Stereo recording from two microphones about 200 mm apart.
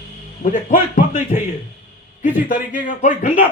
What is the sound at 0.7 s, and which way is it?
Speech, 40° left (ahead or behind).